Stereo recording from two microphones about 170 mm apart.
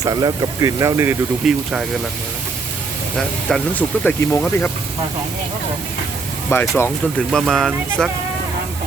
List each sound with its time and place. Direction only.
0.0 s speech: 20° right (ahead or behind)
1.4 s speech: centre (ahead or behind)
3.2 s speech: 5° left (ahead or behind)
6.5 s speech: 15° left (ahead or behind)
7.3 s speech: centre (ahead or behind)